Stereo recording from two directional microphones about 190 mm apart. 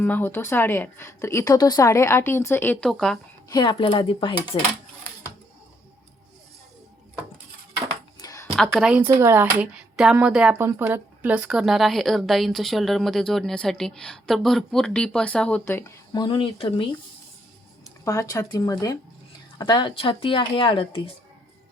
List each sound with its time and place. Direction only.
0.0 s a woman's voice: 10° left (ahead or behind)
3.5 s speech: 25° left (ahead or behind)
8.2 s a sound: 20° left (ahead or behind)
8.5 s speech: centre (ahead or behind)
16.1 s speech: 25° left (ahead or behind)
18.0 s speech: 15° left (ahead or behind)